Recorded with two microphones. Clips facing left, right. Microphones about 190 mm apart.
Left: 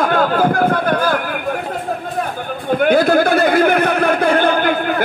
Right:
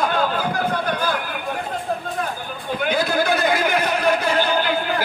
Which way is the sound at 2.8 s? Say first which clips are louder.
Left 8 dB; 50° left (ahead or behind).